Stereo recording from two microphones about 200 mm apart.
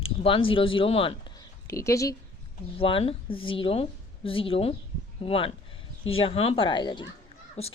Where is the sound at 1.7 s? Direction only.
15° left (ahead or behind).